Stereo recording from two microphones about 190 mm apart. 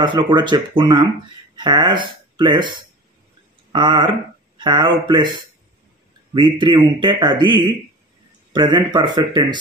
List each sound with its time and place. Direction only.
0.0 s a man's voice: 25° right (ahead or behind)